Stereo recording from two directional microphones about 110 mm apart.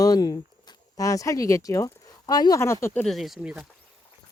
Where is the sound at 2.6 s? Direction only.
25° left (ahead or behind).